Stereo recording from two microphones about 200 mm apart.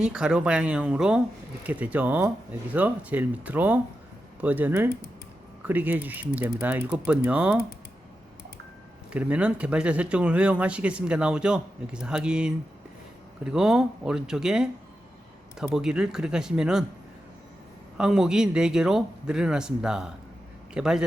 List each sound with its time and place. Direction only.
0.0 s speech: 5° right (ahead or behind)
9.1 s speech: 5° right (ahead or behind)
17.9 s speech: 5° right (ahead or behind)